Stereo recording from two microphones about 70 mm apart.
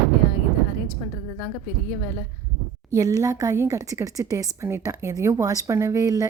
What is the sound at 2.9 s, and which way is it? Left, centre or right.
Speech, right.